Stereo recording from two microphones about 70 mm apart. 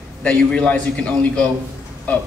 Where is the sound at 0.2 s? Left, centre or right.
Centre.